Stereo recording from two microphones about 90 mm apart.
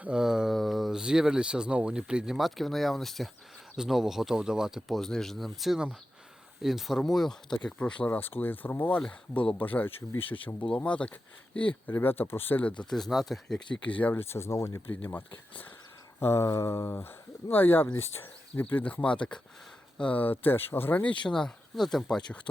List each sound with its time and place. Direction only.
0.0 s speech: 10° right (ahead or behind); by 10.2 s 25° left (ahead or behind)
10.2 s speech: 80° left
10.8 s speech: 15° left (ahead or behind)
12.9 s speech: centre (ahead or behind)
13.8 s speech: 15° left (ahead or behind)
18.6 s speech: 15° left (ahead or behind)
21.2 s speech: 5° left (ahead or behind)